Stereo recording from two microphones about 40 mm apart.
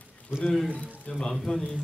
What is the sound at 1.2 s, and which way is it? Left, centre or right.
Speech, centre.